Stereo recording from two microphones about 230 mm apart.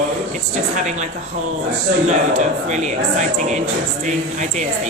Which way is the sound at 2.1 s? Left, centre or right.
Right.